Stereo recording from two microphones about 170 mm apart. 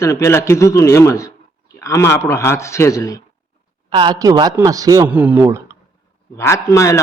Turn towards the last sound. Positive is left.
turn(degrees=15)  # may be behind; listen again after turning